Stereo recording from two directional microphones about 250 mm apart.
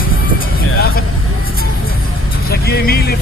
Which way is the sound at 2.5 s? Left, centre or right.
Left.